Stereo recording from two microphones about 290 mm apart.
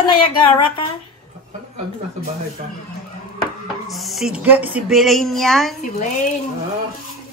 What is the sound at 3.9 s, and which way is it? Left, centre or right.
A woman's voice, centre.